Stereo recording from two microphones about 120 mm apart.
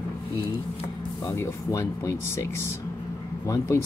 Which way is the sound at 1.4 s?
25° left (ahead or behind).